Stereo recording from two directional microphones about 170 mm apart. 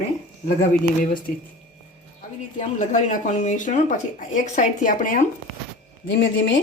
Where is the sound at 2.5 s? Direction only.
45° left (ahead or behind).